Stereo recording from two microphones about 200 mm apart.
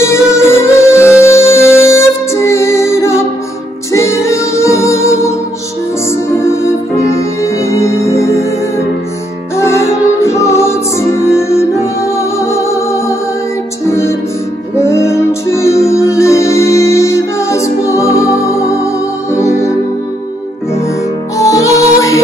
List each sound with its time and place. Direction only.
0.0 s music: 15° left (ahead or behind)
7.4 s music: 15° left (ahead or behind)
9.6 s music: 15° left (ahead or behind)
21.4 s music: 15° left (ahead or behind)